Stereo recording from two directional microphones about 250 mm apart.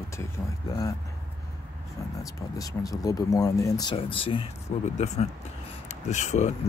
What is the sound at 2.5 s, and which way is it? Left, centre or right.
Speech, centre.